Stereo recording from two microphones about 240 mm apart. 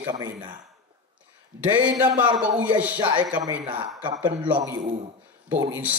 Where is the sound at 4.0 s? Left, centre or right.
Centre.